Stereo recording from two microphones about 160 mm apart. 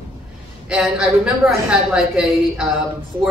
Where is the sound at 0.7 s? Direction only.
Centre (ahead or behind).